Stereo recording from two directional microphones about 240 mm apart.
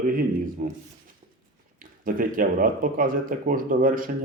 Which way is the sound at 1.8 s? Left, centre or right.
Right.